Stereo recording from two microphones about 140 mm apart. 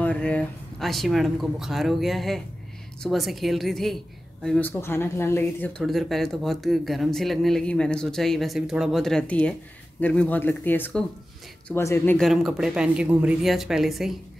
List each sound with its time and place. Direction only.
0.0 s speech: 10° left (ahead or behind)
4.6 s speech: 15° left (ahead or behind)
12.2 s speech: centre (ahead or behind)